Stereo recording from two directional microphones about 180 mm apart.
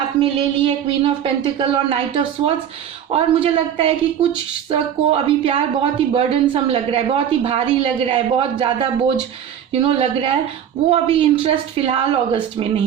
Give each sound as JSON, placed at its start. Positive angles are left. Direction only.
{"t": 0.2, "sound": "a woman's voice", "side_deg": -30}